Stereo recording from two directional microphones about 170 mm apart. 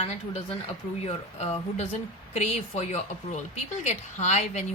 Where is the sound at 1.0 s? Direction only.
35° left (ahead or behind).